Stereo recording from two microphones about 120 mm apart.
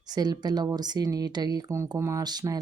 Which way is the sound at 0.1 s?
35° right (ahead or behind).